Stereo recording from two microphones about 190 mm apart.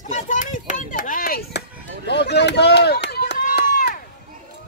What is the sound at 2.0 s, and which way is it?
Chop, 60° left (ahead or behind).